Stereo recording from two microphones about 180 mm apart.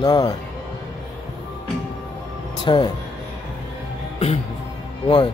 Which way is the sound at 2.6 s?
25° left (ahead or behind).